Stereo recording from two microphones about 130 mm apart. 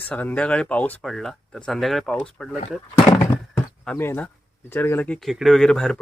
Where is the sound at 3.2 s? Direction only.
15° left (ahead or behind).